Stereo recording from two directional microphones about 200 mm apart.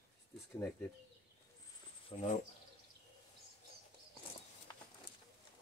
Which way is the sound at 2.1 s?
25° left (ahead or behind).